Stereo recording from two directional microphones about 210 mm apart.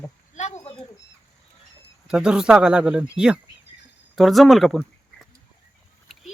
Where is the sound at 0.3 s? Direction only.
30° left (ahead or behind).